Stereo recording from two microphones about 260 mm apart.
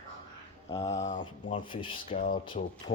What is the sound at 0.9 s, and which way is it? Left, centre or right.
Speech, left.